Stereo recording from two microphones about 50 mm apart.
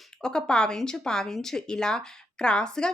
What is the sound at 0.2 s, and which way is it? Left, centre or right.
Speech, centre.